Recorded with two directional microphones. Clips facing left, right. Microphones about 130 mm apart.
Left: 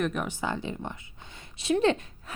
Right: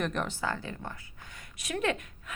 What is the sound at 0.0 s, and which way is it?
Speech, 5° left (ahead or behind).